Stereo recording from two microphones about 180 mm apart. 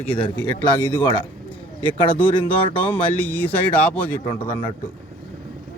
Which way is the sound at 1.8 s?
30° left (ahead or behind).